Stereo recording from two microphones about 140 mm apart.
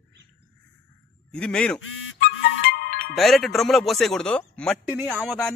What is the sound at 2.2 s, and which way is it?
Music, 90° left.